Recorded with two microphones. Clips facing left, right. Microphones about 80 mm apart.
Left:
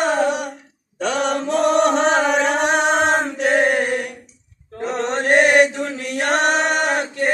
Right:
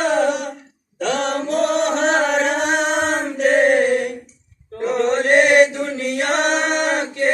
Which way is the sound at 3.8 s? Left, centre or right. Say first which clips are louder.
Right 4 dB; left.